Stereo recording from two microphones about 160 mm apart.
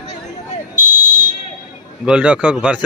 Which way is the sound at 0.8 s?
15° right (ahead or behind).